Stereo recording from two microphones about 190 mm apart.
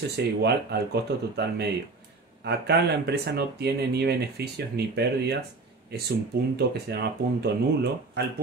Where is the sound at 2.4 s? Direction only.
60° right (ahead or behind).